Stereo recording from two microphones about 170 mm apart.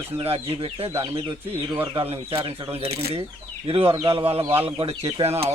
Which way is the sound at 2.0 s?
30° right (ahead or behind).